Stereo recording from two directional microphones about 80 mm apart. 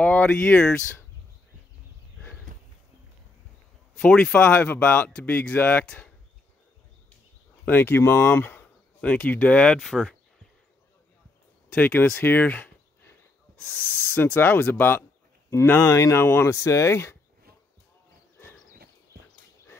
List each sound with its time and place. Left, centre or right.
0.0 s speech: centre
4.0 s speech: centre
7.6 s speech: left; by 10.1 s centre
11.7 s speech: centre
15.9 s speech: left
16.5 s speech: left